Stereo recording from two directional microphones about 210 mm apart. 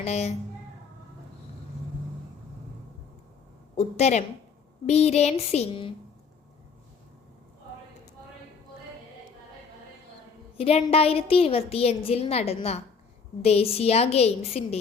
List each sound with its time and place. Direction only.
0.0 s speech: 30° left (ahead or behind)
3.8 s speech: 30° left (ahead or behind)
10.6 s a woman's voice: 30° left (ahead or behind)